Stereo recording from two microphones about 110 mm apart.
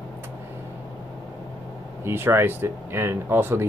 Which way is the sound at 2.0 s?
20° right (ahead or behind).